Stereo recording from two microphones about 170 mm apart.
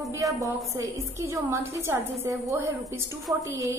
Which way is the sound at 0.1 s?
20° right (ahead or behind).